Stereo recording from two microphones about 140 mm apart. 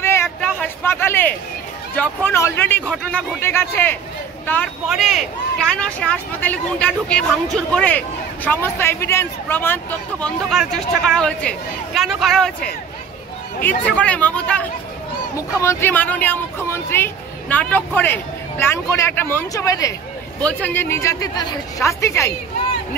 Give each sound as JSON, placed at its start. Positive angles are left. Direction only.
{"t": 0.0, "sound": "a sound", "side_deg": 20}
{"t": 2.0, "sound": "speech", "side_deg": 15}
{"t": 4.8, "sound": "speech", "side_deg": 0}
{"t": 15.3, "sound": "speech", "side_deg": 20}
{"t": 20.4, "sound": "speech", "side_deg": 15}